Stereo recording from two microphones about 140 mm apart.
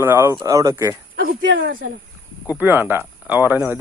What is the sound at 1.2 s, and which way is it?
Speech, 90° right.